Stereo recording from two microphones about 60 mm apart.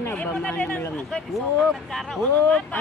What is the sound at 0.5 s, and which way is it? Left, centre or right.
Speech, left.